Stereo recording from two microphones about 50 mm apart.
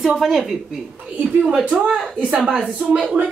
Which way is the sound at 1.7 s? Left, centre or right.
Right.